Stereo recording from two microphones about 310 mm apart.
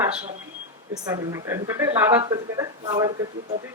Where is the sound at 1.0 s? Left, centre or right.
Centre.